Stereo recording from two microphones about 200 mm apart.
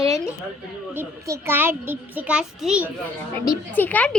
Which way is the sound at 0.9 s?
10° right (ahead or behind).